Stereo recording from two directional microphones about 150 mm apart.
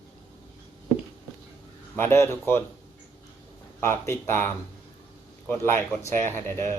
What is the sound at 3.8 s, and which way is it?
Speech, 15° left (ahead or behind).